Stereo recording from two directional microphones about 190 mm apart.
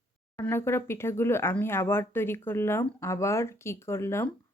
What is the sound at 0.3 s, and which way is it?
Speech, 15° left (ahead or behind).